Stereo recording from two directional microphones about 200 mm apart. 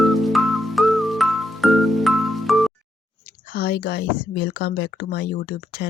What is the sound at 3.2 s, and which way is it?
Speech, 50° left (ahead or behind).